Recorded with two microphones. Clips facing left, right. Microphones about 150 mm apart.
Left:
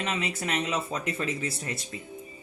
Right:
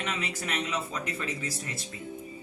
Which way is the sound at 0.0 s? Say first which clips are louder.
Left 3 dB; 30° left (ahead or behind).